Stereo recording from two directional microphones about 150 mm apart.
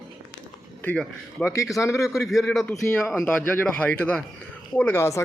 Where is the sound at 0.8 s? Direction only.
10° left (ahead or behind).